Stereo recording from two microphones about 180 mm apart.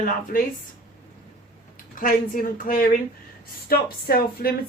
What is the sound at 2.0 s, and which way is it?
A woman's voice, 50° left (ahead or behind).